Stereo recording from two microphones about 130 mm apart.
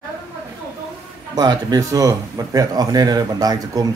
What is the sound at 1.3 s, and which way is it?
Speech, 35° right (ahead or behind).